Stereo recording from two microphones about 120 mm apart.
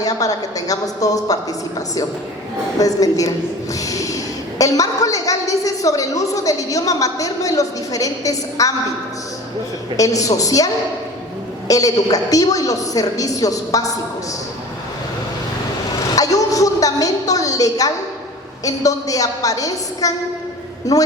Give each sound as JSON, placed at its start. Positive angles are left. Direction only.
{"t": 0.0, "sound": "a woman's voice", "side_deg": 30}
{"t": 2.7, "sound": "a woman's voice", "side_deg": 30}
{"t": 10.0, "sound": "a woman's voice", "side_deg": 30}
{"t": 11.7, "sound": "a woman's voice", "side_deg": 30}
{"t": 16.1, "sound": "a woman's voice", "side_deg": 30}